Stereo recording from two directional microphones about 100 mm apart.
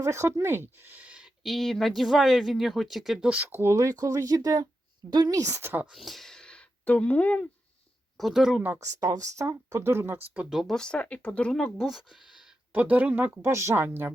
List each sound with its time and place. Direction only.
0.0 s speech: 30° right (ahead or behind); by 1.3 s 10° right (ahead or behind)
1.5 s speech: centre (ahead or behind)
3.2 s speech: 15° right (ahead or behind)
5.9 s speech: centre (ahead or behind)
8.2 s speech: 5° right (ahead or behind)
8.8 s speech: 35° right (ahead or behind)
10.5 s speech: centre (ahead or behind)
12.7 s speech: 15° right (ahead or behind)
13.4 s speech: 30° right (ahead or behind)